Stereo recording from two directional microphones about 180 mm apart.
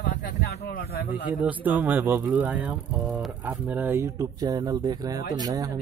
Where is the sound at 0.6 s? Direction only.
55° left (ahead or behind).